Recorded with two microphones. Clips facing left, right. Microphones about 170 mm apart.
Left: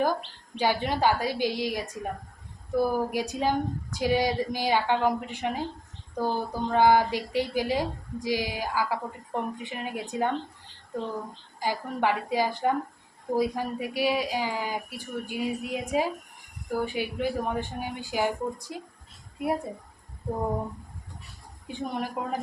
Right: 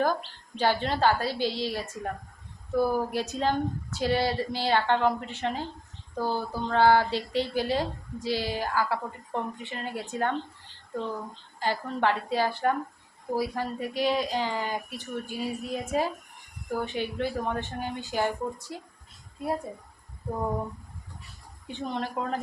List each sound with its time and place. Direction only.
0.6 s speech: 10° left (ahead or behind)
11.6 s speech: 10° left (ahead or behind)
21.7 s speech: 10° left (ahead or behind)